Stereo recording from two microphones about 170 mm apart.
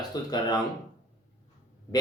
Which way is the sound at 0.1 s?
25° left (ahead or behind).